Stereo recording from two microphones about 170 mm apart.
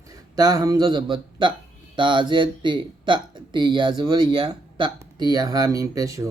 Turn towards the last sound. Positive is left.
turn(degrees=-20)  # may be behind; listen again after turning